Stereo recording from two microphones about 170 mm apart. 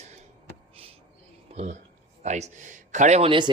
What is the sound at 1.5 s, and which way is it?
Speech, 40° right (ahead or behind).